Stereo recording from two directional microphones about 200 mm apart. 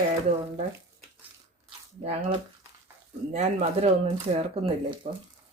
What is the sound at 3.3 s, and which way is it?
Speech, 30° right (ahead or behind).